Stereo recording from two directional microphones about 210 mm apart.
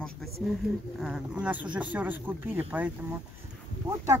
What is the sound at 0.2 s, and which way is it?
Speech, centre (ahead or behind).